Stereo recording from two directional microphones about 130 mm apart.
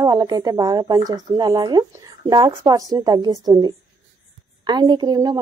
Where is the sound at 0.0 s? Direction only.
35° right (ahead or behind).